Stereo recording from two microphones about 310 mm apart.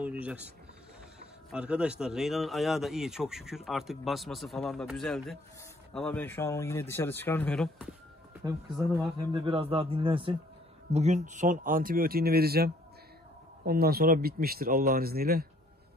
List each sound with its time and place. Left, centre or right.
0.2 s speech: centre
1.5 s speech: centre
8.9 s speech: centre; by 15.4 s right